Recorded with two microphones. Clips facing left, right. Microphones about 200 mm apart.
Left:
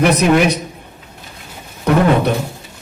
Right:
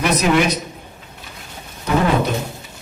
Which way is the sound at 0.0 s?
60° left (ahead or behind).